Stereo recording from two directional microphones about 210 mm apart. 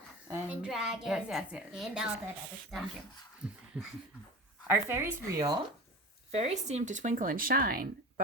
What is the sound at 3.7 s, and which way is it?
A woman's voice, 5° right (ahead or behind).